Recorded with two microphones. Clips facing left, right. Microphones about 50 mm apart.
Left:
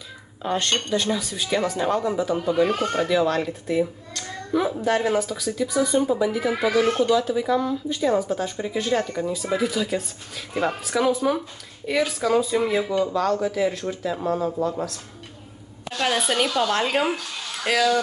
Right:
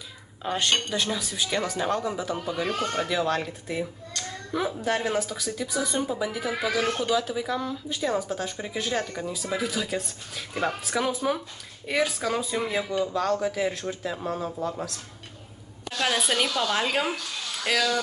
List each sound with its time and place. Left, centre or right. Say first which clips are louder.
0.4 s speech: left 2 dB; centre
2.7 s speech: left 4 dB; left
3.1 s speech: left 5 dB; centre
16.2 s speech: left 3 dB; centre
16.4 s speech: left 4 dB; centre
16.7 s speech: left 4 dB; centre